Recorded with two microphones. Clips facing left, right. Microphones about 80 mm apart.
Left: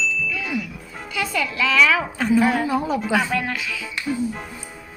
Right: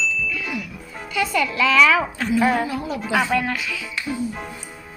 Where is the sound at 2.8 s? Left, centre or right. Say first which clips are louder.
Left 1 dB; centre.